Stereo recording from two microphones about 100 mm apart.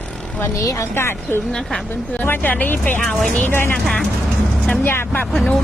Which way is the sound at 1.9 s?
20° left (ahead or behind).